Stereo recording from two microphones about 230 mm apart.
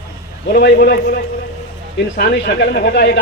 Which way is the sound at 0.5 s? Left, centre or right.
Left.